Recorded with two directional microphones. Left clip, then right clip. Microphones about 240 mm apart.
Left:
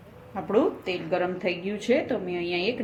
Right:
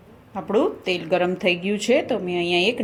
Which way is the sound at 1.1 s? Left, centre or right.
Right.